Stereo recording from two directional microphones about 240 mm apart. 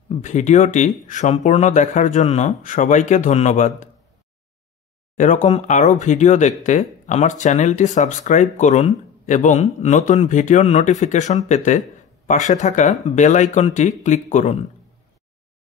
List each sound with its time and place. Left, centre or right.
0.1 s speech: left
5.1 s speech: left